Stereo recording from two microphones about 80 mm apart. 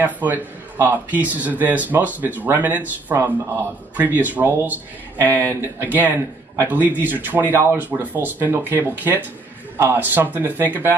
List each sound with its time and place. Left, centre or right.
0.0 s a man's voice: right